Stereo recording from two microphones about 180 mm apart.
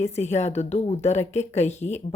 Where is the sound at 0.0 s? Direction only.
35° left (ahead or behind).